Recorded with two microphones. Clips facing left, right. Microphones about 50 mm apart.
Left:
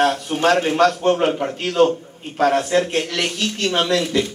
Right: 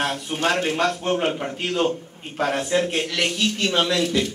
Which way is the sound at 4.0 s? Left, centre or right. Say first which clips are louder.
Left 2 dB; centre.